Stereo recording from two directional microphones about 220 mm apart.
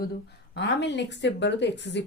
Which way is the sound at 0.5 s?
50° left (ahead or behind).